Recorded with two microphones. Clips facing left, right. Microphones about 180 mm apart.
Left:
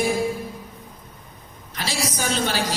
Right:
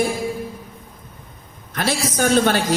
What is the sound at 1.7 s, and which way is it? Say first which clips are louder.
Speech: right 6 dB; 55° right (ahead or behind).